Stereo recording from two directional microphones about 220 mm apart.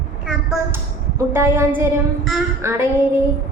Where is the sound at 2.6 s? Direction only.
10° right (ahead or behind).